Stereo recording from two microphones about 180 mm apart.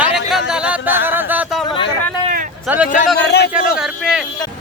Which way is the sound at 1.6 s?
30° left (ahead or behind).